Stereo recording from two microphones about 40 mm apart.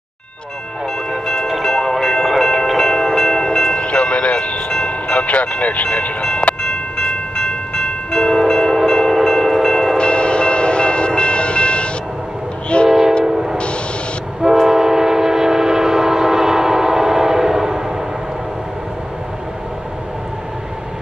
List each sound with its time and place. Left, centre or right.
1.2 s music: centre
3.7 s music: left
4.7 s train: left
6.6 s train: left
8.5 s train: centre
9.9 s train: left
13.2 s train: centre